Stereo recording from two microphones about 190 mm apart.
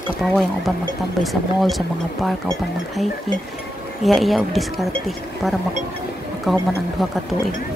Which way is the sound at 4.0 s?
Centre (ahead or behind).